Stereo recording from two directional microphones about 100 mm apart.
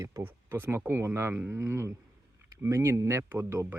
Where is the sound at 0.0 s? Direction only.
25° right (ahead or behind).